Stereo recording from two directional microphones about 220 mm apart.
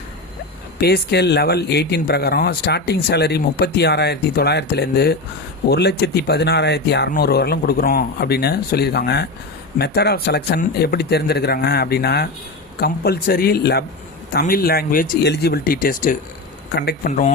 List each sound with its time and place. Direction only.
0.8 s speech: 45° left (ahead or behind)
17.1 s speech: 35° left (ahead or behind)